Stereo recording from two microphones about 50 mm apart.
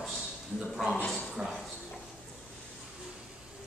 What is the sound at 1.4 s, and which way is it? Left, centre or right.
Speech, centre.